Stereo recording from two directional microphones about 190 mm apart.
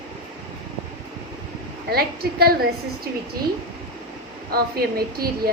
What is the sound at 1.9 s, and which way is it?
Speech, 55° right (ahead or behind).